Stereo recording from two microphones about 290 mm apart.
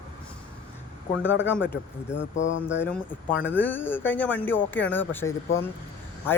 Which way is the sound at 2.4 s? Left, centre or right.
Left.